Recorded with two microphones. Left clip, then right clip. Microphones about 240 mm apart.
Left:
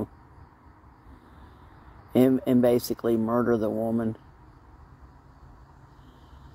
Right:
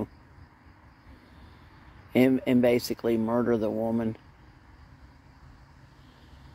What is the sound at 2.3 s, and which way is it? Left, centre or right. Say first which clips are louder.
Speech: left 1 dB; left.